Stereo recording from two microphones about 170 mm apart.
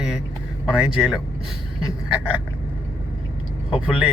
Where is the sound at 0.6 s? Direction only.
Centre (ahead or behind).